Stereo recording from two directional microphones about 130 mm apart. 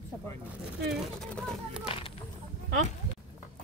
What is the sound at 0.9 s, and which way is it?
Speech, 5° left (ahead or behind).